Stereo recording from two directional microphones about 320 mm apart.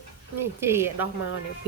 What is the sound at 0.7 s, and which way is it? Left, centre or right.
Speech, centre.